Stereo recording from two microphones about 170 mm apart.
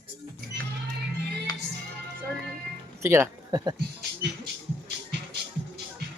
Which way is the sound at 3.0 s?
15° right (ahead or behind).